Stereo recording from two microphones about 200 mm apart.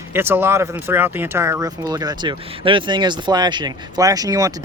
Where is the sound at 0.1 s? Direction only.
10° right (ahead or behind).